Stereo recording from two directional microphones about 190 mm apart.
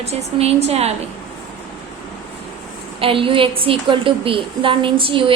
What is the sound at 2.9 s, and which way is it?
A woman's voice, 30° right (ahead or behind).